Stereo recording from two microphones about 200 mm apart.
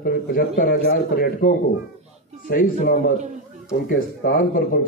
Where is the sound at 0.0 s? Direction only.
50° left (ahead or behind).